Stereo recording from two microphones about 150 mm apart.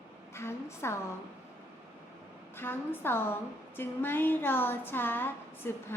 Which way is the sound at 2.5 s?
15° left (ahead or behind).